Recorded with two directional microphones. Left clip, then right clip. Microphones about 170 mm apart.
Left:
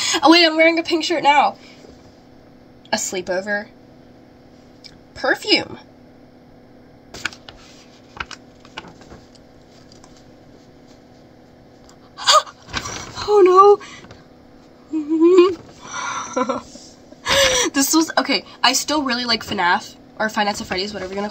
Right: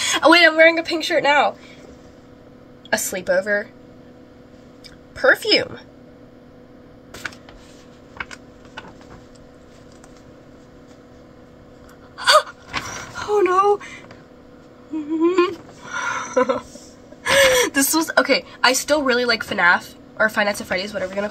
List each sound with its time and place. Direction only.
0.0 s a woman's voice: 15° right (ahead or behind)
3.1 s a woman's voice: 25° right (ahead or behind)
5.1 s a woman's voice: 20° right (ahead or behind)
8.2 s typing: centre (ahead or behind)
12.2 s gasp: 15° right (ahead or behind)
13.1 s a sound: 10° right (ahead or behind)
15.0 s a sound: 10° right (ahead or behind)
17.2 s a woman's voice: 10° right (ahead or behind)